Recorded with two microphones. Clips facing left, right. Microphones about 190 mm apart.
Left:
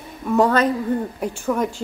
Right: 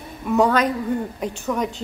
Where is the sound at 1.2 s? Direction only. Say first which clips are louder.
Left 2 dB; 10° left (ahead or behind).